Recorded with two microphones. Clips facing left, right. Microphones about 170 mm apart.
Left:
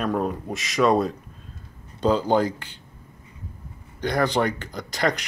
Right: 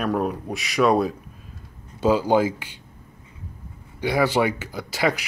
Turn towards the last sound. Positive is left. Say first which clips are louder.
# right 1 dB
turn(degrees=-5)  # may be behind; listen again after turning